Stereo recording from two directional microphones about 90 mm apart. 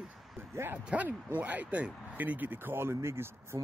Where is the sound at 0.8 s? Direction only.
15° right (ahead or behind).